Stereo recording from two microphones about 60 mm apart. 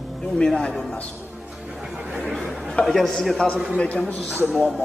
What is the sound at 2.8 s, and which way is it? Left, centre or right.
Speech, centre.